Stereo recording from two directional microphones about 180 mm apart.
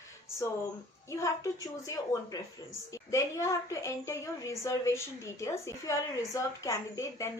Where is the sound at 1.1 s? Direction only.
15° left (ahead or behind).